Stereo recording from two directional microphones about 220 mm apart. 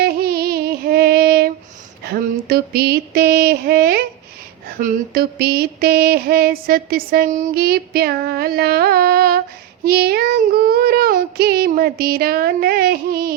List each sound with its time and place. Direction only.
0.0 s female singing: 45° right (ahead or behind)